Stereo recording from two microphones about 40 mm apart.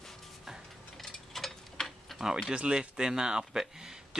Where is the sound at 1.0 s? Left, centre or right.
Centre.